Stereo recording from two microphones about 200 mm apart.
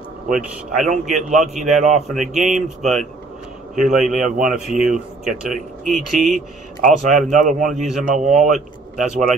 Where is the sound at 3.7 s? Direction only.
Centre (ahead or behind).